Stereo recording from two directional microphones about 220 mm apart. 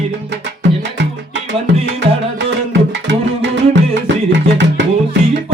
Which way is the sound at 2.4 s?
50° right (ahead or behind).